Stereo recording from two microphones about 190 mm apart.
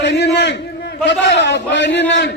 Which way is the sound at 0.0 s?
65° left (ahead or behind).